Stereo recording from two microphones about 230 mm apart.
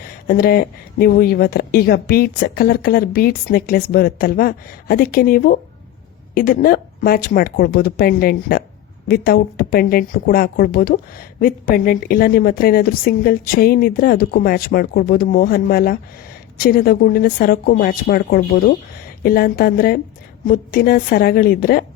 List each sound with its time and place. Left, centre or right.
0.3 s speech: left